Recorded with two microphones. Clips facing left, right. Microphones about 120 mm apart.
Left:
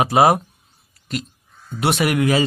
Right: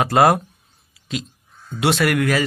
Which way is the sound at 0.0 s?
10° left (ahead or behind).